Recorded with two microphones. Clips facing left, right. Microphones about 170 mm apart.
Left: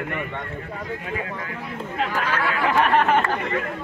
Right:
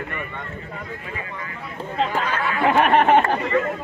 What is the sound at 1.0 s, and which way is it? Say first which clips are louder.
Speech: left 4 dB; 70° left (ahead or behind).